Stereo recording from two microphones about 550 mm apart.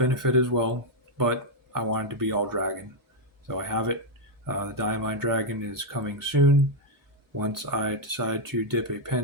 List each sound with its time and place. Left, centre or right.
0.0 s speech: right